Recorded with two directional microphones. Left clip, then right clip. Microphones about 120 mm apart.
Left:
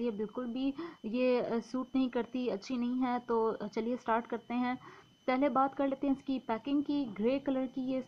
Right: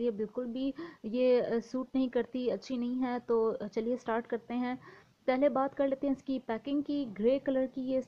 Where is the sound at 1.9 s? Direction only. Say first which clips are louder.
Right 2 dB; 30° right (ahead or behind).